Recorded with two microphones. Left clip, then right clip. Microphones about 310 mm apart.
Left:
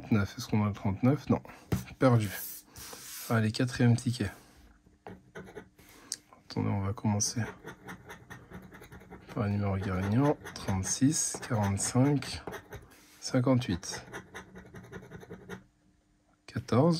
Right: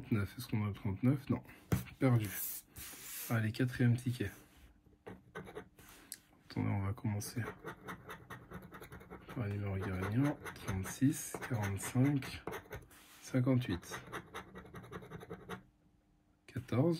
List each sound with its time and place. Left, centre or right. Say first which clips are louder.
0.1 s speech: left 8 dB; centre
3.3 s speech: left 7 dB; centre
6.0 s speech: left 14 dB; centre
9.4 s speech: left 9 dB; centre
16.4 s a sound: left 8 dB; centre